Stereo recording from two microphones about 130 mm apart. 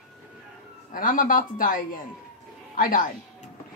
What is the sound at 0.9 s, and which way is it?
Speech, 90° left.